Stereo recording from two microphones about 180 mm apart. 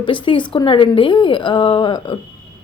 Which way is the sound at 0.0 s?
25° left (ahead or behind).